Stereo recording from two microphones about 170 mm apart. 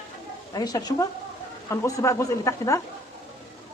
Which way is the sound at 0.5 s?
25° left (ahead or behind).